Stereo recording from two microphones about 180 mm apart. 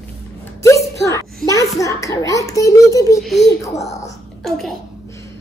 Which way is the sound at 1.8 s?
20° left (ahead or behind).